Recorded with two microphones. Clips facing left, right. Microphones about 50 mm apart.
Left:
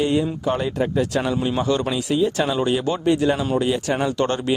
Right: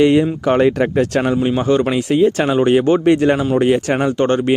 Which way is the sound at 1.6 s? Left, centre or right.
Right.